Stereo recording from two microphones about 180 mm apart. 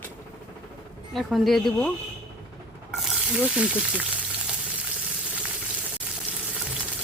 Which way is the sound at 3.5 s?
5° right (ahead or behind).